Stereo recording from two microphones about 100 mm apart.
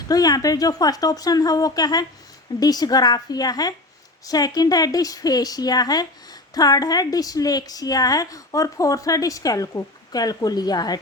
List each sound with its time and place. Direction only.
0.1 s speech: 40° left (ahead or behind)